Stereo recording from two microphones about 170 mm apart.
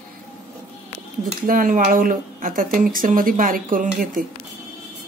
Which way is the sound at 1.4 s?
55° right (ahead or behind).